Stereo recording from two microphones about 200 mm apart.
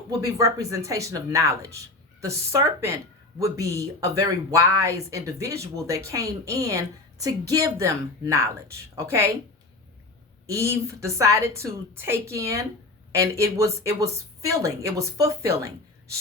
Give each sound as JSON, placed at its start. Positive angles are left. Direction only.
{"t": 0.2, "sound": "speech", "side_deg": -15}
{"t": 10.4, "sound": "speech", "side_deg": -15}